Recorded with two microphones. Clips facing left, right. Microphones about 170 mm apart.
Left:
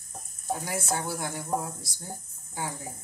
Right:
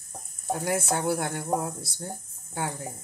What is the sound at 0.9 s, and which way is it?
Speech, 55° right (ahead or behind).